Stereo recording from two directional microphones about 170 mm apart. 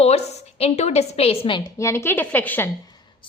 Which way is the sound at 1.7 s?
15° left (ahead or behind).